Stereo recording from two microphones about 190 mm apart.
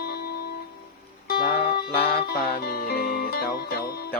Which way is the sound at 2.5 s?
50° left (ahead or behind).